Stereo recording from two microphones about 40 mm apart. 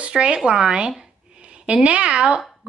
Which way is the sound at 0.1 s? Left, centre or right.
Right.